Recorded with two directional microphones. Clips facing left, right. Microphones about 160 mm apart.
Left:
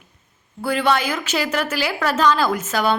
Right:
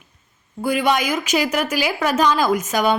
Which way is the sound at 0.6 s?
15° right (ahead or behind).